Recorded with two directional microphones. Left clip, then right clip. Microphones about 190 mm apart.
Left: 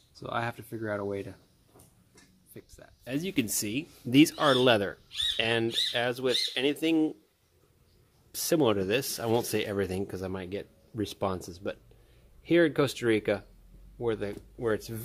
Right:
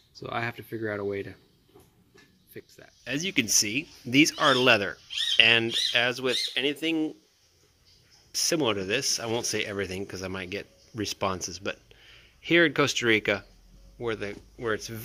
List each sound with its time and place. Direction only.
0.1 s speech: 5° left (ahead or behind)
2.5 s speech: 5° left (ahead or behind); by 4.4 s 20° left (ahead or behind)
4.4 s speech: 10° left (ahead or behind)
8.3 s speech: 20° left (ahead or behind); by 13.5 s centre (ahead or behind)
13.9 s speech: 15° left (ahead or behind)